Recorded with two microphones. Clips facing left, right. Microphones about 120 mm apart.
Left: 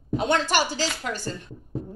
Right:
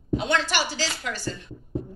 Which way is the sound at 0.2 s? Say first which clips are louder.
Left 5 dB; 45° left (ahead or behind).